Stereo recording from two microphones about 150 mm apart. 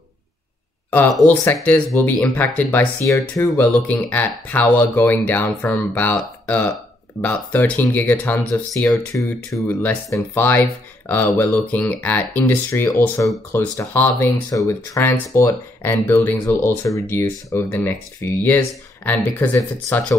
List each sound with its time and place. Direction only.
1.4 s speech: 15° left (ahead or behind)